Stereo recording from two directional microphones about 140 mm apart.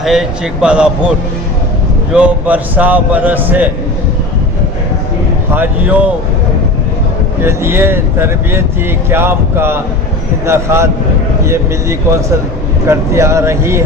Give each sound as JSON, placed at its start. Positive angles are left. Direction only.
{"t": 0.0, "sound": "speech", "side_deg": -5}
{"t": 2.1, "sound": "speech", "side_deg": -10}
{"t": 5.5, "sound": "speech", "side_deg": -10}
{"t": 7.4, "sound": "speech", "side_deg": -15}